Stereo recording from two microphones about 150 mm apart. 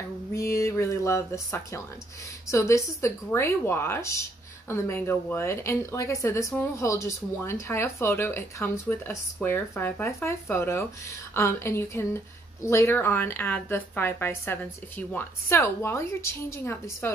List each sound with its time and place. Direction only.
0.3 s speech: 20° left (ahead or behind)